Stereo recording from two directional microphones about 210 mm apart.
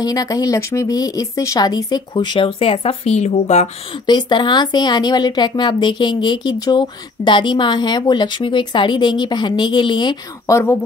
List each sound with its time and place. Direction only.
0.0 s speech: 15° left (ahead or behind)
4.1 s speech: 20° left (ahead or behind)